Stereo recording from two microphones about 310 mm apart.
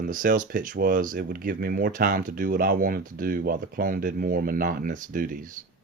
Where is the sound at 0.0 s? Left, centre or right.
Right.